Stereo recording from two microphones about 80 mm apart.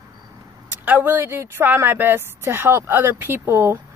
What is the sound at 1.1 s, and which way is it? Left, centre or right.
Speech, right.